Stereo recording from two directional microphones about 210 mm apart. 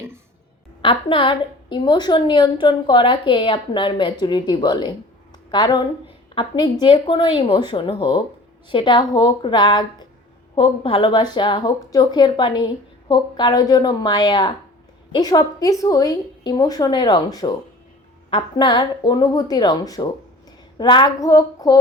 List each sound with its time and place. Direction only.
0.8 s a woman's voice: 25° left (ahead or behind)